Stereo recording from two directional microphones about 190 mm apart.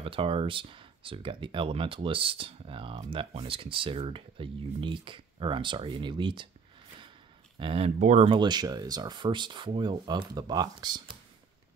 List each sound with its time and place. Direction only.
0.0 s speech: 30° right (ahead or behind)
7.5 s speech: 30° right (ahead or behind)